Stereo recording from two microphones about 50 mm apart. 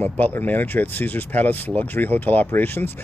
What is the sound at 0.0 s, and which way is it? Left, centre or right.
Speech, left.